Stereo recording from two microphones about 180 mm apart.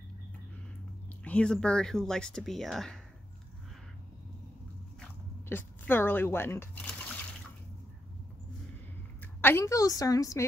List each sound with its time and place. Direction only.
1.2 s speech: 5° left (ahead or behind)
5.5 s speech: 10° left (ahead or behind)
9.2 s a woman's voice: 10° left (ahead or behind)